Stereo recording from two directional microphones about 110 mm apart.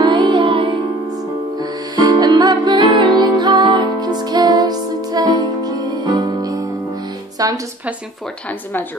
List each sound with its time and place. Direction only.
0.0 s music: 45° right (ahead or behind)
1.6 s music: 40° right (ahead or behind)